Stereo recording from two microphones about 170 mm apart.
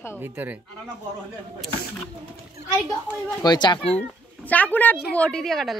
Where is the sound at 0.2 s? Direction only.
10° right (ahead or behind).